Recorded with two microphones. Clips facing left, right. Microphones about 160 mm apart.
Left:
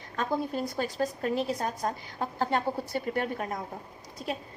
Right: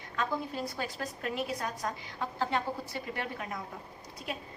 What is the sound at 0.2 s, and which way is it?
A woman's voice, 40° left (ahead or behind).